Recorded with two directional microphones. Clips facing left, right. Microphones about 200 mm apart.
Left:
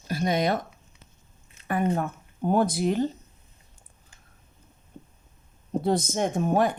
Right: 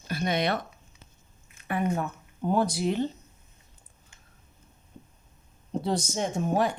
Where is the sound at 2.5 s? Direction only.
50° left (ahead or behind).